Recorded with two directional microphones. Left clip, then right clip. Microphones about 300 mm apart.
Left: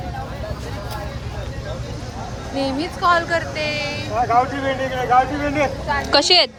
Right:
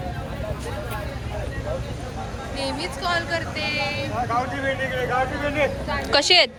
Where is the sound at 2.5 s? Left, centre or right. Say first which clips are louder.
Left 5 dB; left.